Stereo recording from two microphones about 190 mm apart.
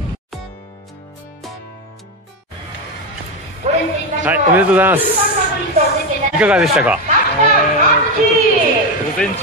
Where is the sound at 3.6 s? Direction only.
40° right (ahead or behind).